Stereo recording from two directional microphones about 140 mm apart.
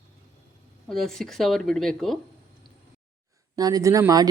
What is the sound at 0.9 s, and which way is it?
Speech, 5° left (ahead or behind).